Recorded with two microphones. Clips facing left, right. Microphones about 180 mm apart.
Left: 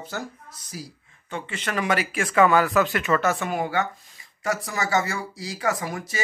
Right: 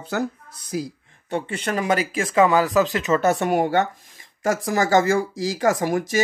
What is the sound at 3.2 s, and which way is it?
Speech, 45° right (ahead or behind).